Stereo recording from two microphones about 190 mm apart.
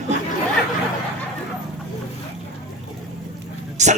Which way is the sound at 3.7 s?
40° right (ahead or behind).